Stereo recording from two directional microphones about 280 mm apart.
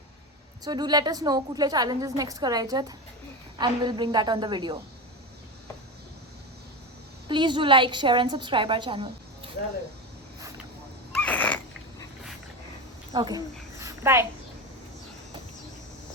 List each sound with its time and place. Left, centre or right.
0.6 s a woman's voice: centre
7.3 s a woman's voice: centre
11.1 s wheeze: centre
13.1 s a child's voice: centre